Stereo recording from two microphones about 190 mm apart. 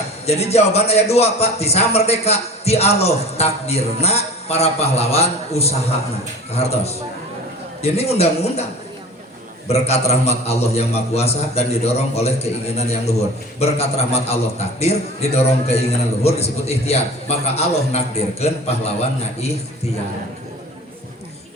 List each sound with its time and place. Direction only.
0.3 s a man's voice: 35° left (ahead or behind)
9.6 s a man's voice: 35° left (ahead or behind)